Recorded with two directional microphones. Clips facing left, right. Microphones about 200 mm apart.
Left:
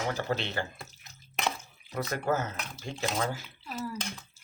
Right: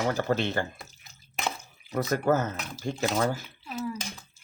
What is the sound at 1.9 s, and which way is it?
Speech, 45° right (ahead or behind).